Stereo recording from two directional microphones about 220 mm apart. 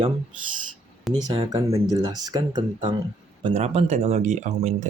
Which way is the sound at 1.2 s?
15° right (ahead or behind).